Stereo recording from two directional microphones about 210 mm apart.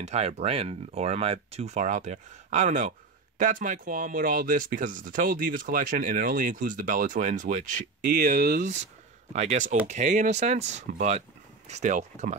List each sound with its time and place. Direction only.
0.0 s speech: 30° right (ahead or behind)